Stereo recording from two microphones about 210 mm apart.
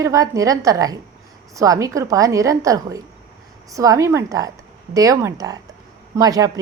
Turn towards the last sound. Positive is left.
turn(degrees=-15)  # may be behind; listen again after turning